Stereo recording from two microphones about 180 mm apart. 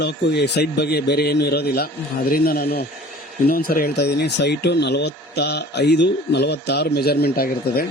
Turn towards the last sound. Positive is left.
turn(degrees=55)  # may be behind; listen again after turning